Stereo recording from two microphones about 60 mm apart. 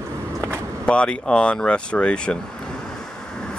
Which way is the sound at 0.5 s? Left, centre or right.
Centre.